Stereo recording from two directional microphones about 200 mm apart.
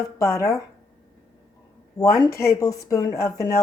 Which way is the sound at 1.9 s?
15° left (ahead or behind).